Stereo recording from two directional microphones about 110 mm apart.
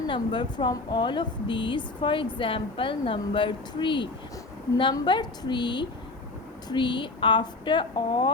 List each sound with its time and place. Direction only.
0.1 s speech: 45° left (ahead or behind)